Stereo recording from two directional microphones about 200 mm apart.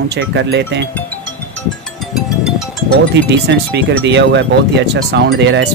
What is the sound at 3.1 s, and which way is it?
Speech, 60° right (ahead or behind).